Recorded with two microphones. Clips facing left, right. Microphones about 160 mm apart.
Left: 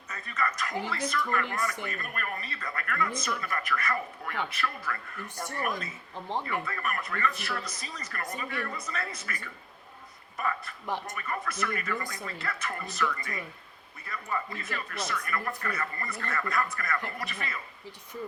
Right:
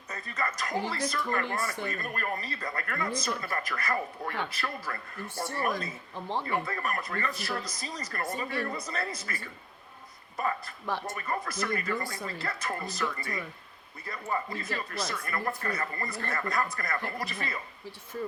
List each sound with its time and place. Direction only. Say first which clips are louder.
0.1 s speech: left 1 dB; 30° right (ahead or behind)
1.3 s speech: even; 20° right (ahead or behind)
1.8 s speech: right 2 dB; 30° right (ahead or behind)
6.5 s speech: right 2 dB; 35° right (ahead or behind)
10.8 s speech: right 1 dB; 15° left (ahead or behind)
11.1 s speech: right 1 dB; 30° right (ahead or behind)